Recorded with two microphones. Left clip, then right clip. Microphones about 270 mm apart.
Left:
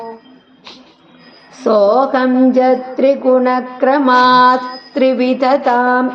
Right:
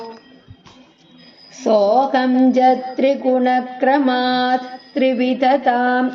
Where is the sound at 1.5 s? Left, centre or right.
Centre.